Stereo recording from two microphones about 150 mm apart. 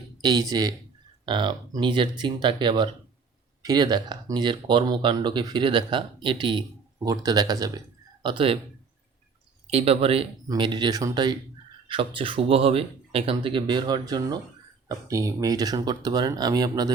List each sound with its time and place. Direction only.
0.2 s speech: 25° right (ahead or behind)
9.6 s speech: 40° right (ahead or behind)
10.5 s speech: 30° right (ahead or behind)